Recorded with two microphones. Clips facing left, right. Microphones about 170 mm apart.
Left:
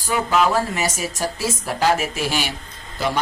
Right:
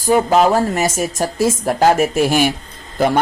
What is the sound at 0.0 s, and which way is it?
Speech, 40° right (ahead or behind).